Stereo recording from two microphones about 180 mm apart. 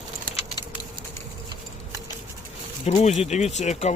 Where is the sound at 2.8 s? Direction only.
40° left (ahead or behind).